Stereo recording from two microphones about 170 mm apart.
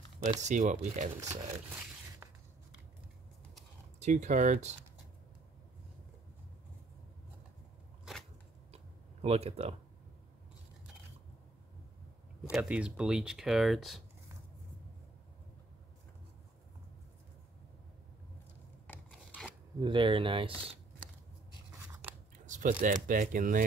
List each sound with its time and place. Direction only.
0.2 s speech: 45° right (ahead or behind)
4.0 s speech: 45° right (ahead or behind)
8.7 s tick-tock: 40° right (ahead or behind)
12.4 s speech: 5° right (ahead or behind)
18.9 s filing: 10° left (ahead or behind)
19.8 s speech: 30° right (ahead or behind)
22.5 s speech: 50° right (ahead or behind)